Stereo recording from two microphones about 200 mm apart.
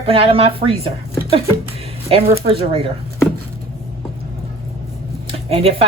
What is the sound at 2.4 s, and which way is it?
Speech, 30° right (ahead or behind).